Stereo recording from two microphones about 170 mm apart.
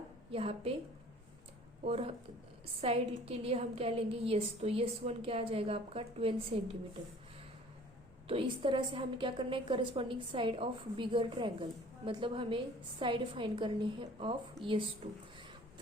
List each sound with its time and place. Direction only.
0.3 s a woman's voice: 35° right (ahead or behind)
1.8 s a woman's voice: 35° right (ahead or behind)
8.3 s a woman's voice: 30° right (ahead or behind)